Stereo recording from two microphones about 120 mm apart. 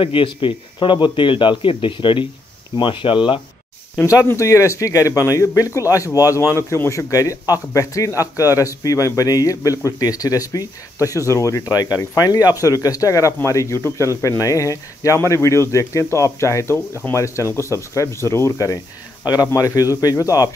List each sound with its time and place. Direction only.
0.0 s a man's voice: 45° left (ahead or behind)
4.3 s a man's voice: 25° left (ahead or behind)